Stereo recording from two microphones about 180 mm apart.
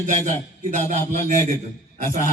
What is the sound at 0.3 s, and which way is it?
Speech, 45° right (ahead or behind).